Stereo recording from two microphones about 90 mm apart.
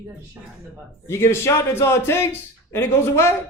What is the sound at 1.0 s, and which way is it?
Speech, 30° left (ahead or behind).